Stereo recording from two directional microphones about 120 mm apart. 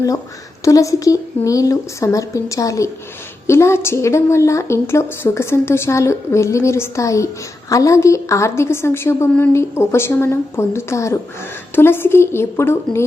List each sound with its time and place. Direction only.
0.6 s speech: 25° left (ahead or behind)